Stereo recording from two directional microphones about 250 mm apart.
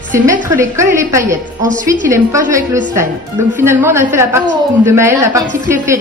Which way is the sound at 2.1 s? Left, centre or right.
Centre.